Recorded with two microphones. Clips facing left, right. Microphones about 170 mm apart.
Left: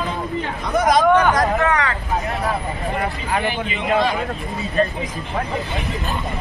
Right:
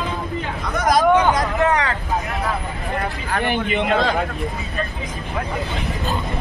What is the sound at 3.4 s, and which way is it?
Speech, 60° right (ahead or behind).